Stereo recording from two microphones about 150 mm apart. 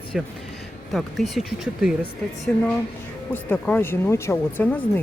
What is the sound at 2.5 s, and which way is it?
Speech, 15° left (ahead or behind).